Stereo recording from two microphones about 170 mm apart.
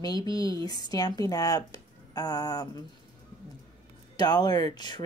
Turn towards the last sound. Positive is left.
turn(degrees=25)  # may be behind; listen again after turning